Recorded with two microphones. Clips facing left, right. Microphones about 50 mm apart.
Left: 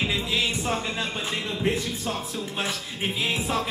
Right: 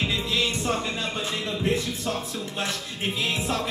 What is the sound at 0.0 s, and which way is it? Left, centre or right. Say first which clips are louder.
Music: even; centre.